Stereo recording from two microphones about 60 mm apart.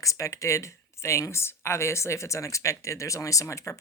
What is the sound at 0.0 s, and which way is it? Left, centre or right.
Speech, left.